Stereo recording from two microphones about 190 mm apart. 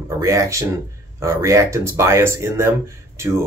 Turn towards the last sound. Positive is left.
turn(degrees=-15)  # may be behind; listen again after turning